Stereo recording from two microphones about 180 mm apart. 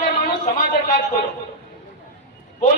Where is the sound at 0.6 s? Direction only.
50° left (ahead or behind).